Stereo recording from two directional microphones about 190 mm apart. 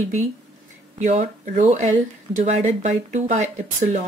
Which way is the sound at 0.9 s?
40° right (ahead or behind).